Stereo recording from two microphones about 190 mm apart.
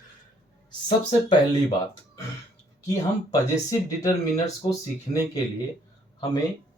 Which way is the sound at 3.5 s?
20° left (ahead or behind).